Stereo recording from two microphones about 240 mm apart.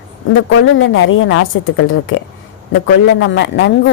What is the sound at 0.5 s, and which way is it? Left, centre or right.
A man's voice, left.